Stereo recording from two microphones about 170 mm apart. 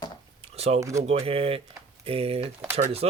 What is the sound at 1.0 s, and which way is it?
Speech, 35° right (ahead or behind).